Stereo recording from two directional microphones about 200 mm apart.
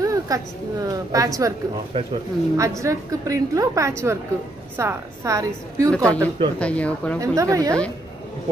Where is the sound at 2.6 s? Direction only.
15° right (ahead or behind).